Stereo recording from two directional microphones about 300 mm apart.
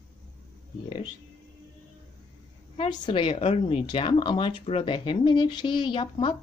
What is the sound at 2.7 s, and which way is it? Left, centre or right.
Speech, centre.